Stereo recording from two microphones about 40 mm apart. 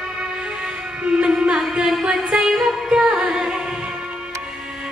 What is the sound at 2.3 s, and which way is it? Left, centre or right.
Music, centre.